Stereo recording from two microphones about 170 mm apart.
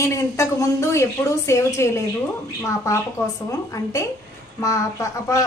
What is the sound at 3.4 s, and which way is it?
Speech, 20° left (ahead or behind).